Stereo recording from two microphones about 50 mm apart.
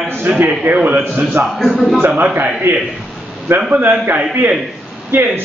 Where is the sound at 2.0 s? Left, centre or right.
Right.